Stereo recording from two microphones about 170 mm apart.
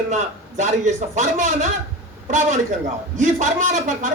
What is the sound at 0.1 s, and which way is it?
Speech, 45° right (ahead or behind).